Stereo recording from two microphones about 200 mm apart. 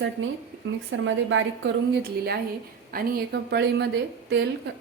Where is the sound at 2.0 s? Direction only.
50° right (ahead or behind).